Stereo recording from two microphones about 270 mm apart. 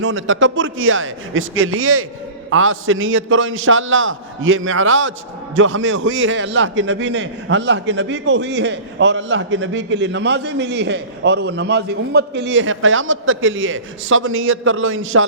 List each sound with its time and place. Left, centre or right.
0.0 s a man's voice: right